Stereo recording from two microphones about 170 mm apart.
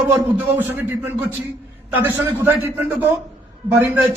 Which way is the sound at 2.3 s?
15° right (ahead or behind).